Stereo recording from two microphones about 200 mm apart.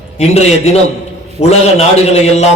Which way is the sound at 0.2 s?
30° left (ahead or behind).